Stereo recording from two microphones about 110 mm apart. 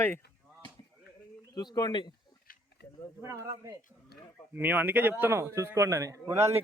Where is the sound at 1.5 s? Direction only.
35° left (ahead or behind).